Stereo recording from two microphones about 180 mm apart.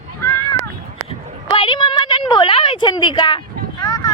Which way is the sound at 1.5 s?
30° left (ahead or behind).